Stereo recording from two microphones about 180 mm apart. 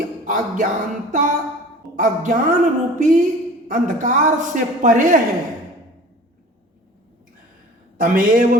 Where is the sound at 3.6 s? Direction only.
45° right (ahead or behind).